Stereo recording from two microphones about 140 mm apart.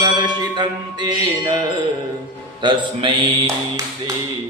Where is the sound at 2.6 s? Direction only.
35° right (ahead or behind).